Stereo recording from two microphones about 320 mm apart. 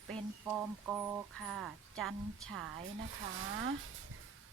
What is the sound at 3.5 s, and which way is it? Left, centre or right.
Speech, right.